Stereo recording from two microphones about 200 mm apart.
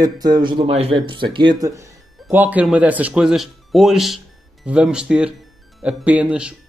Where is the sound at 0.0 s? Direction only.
20° right (ahead or behind).